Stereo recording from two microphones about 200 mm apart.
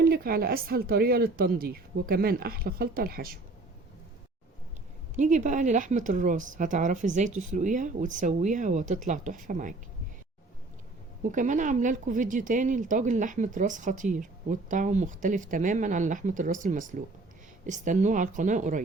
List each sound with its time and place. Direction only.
0.0 s speech: 50° right (ahead or behind)
5.1 s speech: 35° right (ahead or behind)
11.2 s speech: 40° right (ahead or behind)